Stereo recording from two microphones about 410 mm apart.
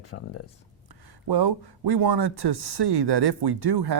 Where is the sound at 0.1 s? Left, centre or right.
Left.